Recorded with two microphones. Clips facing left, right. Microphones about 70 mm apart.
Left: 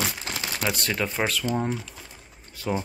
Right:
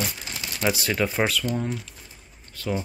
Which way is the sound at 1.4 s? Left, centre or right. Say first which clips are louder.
Left 1 dB; left.